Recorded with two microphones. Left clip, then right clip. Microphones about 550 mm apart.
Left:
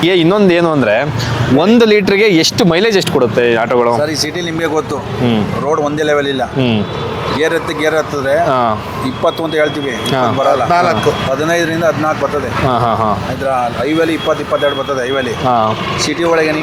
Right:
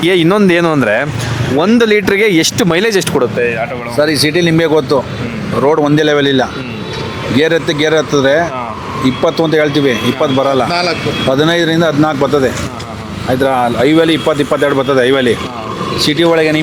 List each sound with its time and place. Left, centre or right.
0.0 s speech: centre
4.0 s speech: right
11.3 s speech: right
13.5 s speech: right